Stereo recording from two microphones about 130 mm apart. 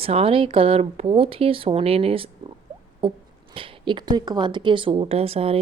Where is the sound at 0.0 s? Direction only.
50° right (ahead or behind).